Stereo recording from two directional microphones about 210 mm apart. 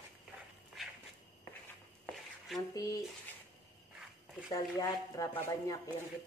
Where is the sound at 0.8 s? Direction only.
Centre (ahead or behind).